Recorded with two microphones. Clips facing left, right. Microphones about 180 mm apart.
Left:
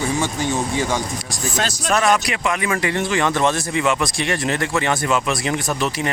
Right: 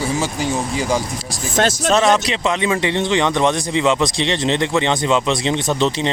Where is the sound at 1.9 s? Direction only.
20° right (ahead or behind).